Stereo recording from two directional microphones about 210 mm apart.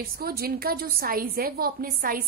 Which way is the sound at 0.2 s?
45° right (ahead or behind).